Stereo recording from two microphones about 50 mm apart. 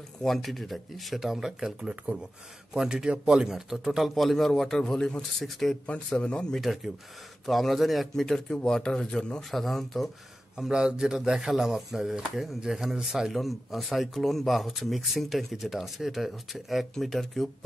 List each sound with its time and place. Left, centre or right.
0.2 s speech: centre
6.1 s a man's voice: centre
6.6 s a man's voice: centre
9.5 s speech: centre
10.6 s speech: centre